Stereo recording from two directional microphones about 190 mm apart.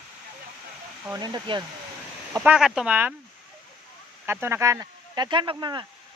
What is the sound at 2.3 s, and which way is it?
Speech, 5° right (ahead or behind).